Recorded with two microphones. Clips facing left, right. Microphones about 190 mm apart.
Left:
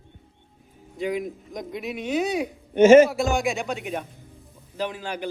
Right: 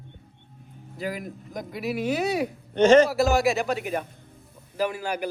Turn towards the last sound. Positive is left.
turn(degrees=-10)  # may be behind; listen again after turning